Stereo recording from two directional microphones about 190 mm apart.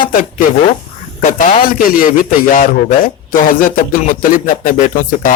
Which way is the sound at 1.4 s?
40° left (ahead or behind).